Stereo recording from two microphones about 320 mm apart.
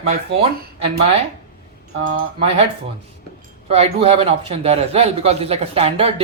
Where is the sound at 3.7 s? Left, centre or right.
Centre.